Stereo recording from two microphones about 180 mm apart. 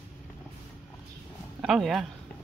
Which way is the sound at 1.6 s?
Centre (ahead or behind).